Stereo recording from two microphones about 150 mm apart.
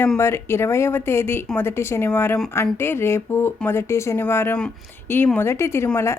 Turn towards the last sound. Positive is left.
turn(degrees=20)  # may be behind; listen again after turning